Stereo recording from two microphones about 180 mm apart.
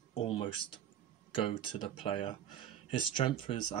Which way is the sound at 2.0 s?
30° left (ahead or behind).